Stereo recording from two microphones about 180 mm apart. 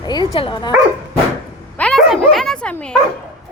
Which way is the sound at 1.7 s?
5° left (ahead or behind).